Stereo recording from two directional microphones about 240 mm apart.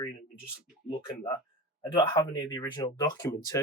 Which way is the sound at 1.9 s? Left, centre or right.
Centre.